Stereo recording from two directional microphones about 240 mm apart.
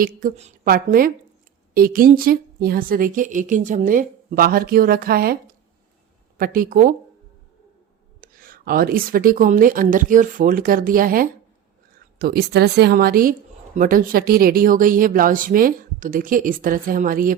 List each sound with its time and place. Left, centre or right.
0.0 s a woman's voice: right
8.2 s a woman's voice: right